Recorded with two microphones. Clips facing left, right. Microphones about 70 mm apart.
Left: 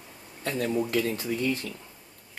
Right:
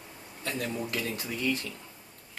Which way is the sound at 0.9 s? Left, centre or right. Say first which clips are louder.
Left 6 dB; left.